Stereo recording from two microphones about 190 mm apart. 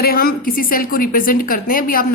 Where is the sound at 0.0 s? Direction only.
50° left (ahead or behind).